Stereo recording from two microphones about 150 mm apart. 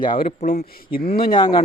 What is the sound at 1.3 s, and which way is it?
Speech, 35° left (ahead or behind).